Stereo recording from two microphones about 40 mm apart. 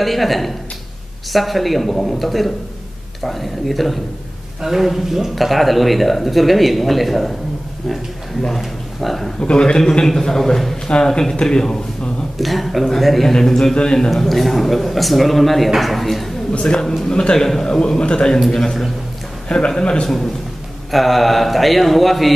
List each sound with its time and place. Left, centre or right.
0.0 s speech: centre
8.5 s speech: centre
9.4 s a man's voice: left
10.9 s a man's voice: left
12.4 s a man's voice: centre
17.7 s a man's voice: left
18.5 s a man's voice: centre
19.8 s a man's voice: left
20.9 s speech: centre